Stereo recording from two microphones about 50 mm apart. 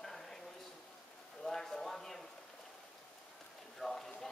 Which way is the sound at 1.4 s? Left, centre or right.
Centre.